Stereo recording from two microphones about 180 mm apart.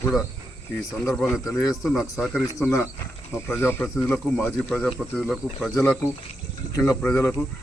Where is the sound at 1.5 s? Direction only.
20° left (ahead or behind).